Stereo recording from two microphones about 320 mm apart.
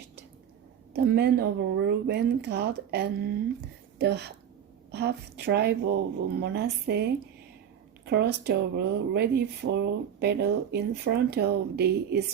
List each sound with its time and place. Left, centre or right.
0.9 s a woman's voice: right
8.1 s speech: right